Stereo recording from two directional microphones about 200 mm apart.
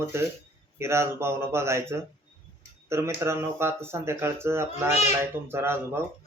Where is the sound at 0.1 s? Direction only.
15° right (ahead or behind).